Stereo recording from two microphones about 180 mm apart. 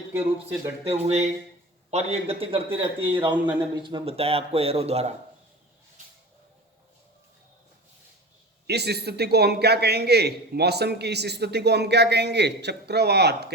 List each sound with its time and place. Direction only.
0.1 s speech: 15° right (ahead or behind)
1.0 s speech: 40° right (ahead or behind)
8.6 s a man's voice: 65° right (ahead or behind)